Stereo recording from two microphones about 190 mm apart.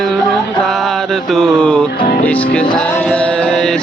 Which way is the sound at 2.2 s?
10° left (ahead or behind).